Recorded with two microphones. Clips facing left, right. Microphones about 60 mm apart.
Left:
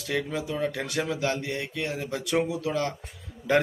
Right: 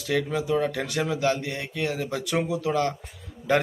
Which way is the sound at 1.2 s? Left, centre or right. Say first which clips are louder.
Right 3 dB; centre.